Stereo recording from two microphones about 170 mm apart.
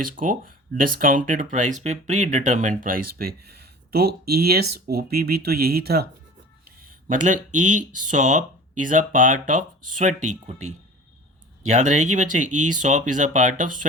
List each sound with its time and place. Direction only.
0.2 s speech: 55° right (ahead or behind)
7.1 s speech: 50° right (ahead or behind)